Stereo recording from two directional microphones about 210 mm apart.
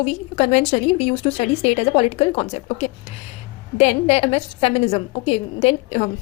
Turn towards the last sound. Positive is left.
turn(degrees=30)  # may be behind; listen again after turning